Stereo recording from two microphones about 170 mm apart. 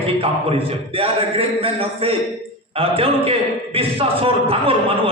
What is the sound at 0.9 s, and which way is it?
A man's voice, 35° right (ahead or behind).